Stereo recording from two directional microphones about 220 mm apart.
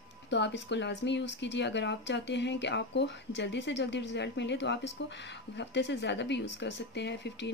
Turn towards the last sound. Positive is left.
turn(degrees=50)  # may be behind; listen again after turning